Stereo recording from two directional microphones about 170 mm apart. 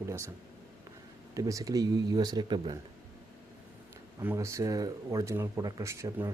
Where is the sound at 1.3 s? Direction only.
20° right (ahead or behind).